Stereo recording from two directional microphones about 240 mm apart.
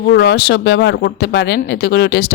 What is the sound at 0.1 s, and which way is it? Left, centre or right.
Speech, left.